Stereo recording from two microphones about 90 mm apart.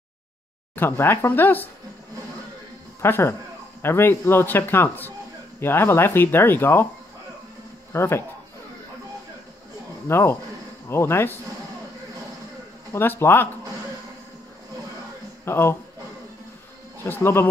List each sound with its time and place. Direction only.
0.7 s speech: 25° left (ahead or behind)
3.0 s speech: 25° left (ahead or behind)
7.9 s speech: 30° left (ahead or behind)
10.0 s speech: 30° left (ahead or behind)
12.9 s speech: 25° left (ahead or behind)
15.4 s speech: 30° left (ahead or behind)
17.0 s speech: 25° left (ahead or behind)